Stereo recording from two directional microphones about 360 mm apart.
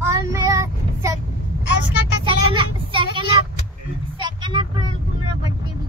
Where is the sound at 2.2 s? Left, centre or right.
Centre.